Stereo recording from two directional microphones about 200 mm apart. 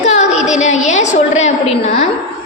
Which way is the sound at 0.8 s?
35° left (ahead or behind).